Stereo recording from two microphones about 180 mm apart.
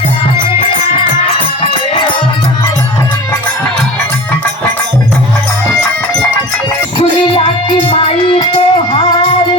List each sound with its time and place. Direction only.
7.9 s music: 30° left (ahead or behind)